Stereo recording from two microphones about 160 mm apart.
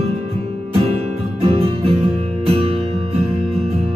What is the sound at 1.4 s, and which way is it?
Music, 40° right (ahead or behind).